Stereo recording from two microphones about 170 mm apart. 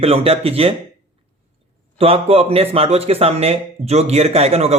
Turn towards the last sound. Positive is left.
turn(degrees=-40)  # may be behind; listen again after turning